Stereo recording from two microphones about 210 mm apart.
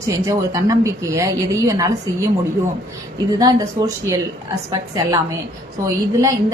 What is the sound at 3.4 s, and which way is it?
A woman's voice, 15° right (ahead or behind).